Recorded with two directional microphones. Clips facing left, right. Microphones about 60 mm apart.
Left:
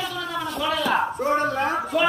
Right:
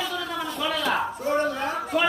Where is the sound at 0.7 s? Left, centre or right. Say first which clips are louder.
Left 3 dB; centre.